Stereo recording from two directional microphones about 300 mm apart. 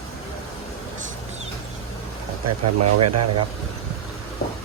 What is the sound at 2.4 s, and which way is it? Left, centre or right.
Speech, right.